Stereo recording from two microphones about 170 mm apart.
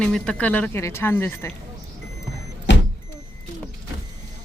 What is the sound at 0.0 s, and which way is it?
Speech, 5° left (ahead or behind).